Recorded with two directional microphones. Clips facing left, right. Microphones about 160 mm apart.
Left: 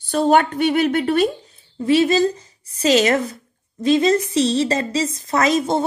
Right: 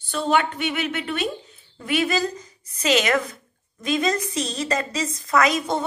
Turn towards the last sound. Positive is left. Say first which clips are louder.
# left 3 dB
turn(degrees=30)  # may be behind; listen again after turning